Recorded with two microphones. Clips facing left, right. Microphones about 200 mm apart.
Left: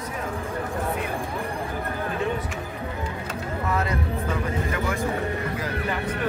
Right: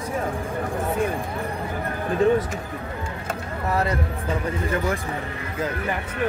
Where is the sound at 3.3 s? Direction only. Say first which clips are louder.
Right 2 dB; 35° right (ahead or behind).